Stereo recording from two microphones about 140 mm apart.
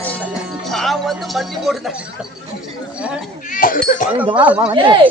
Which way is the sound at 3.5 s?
90° left.